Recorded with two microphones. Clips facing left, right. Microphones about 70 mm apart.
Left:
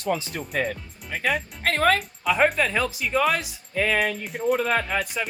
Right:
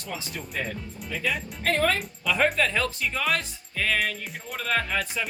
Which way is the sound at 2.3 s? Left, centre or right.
Centre.